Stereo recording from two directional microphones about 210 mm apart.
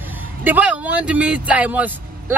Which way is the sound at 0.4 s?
10° right (ahead or behind).